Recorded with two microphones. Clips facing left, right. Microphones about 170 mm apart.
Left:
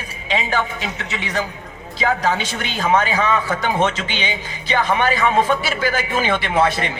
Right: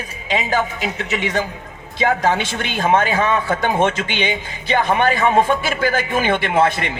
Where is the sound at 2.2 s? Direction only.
50° right (ahead or behind).